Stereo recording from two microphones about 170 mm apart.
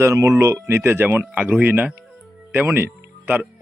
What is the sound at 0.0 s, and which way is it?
Speech, 15° right (ahead or behind).